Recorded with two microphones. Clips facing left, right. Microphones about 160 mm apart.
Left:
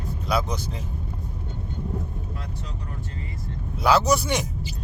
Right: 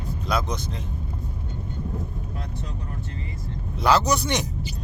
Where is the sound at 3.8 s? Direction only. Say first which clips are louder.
Left 1 dB; 5° left (ahead or behind).